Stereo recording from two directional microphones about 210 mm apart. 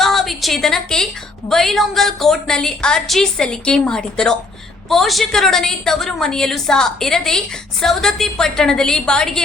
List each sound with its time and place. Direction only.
0.0 s a woman's voice: centre (ahead or behind)